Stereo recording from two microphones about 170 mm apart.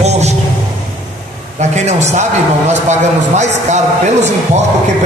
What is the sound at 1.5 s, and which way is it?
A man's voice, 40° right (ahead or behind).